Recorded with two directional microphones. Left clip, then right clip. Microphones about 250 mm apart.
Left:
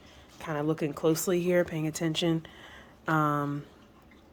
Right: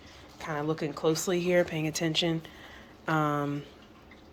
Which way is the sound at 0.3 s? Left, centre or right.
Left.